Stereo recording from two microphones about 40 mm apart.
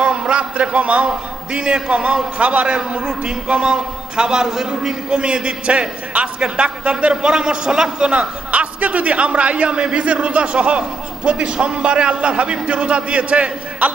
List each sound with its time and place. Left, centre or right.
0.0 s a man's voice: right
8.4 s a man's voice: right